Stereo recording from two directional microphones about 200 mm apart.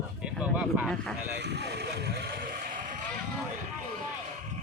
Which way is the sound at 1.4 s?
55° right (ahead or behind).